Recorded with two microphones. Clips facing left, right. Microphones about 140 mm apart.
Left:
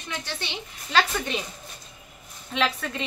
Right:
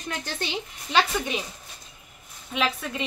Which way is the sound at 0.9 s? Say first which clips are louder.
Even; 10° right (ahead or behind).